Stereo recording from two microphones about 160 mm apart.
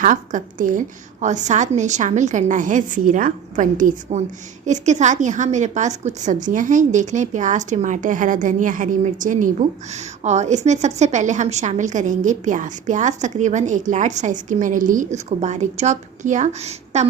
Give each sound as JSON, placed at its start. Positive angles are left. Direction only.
{"t": 0.0, "sound": "a woman's voice", "side_deg": -50}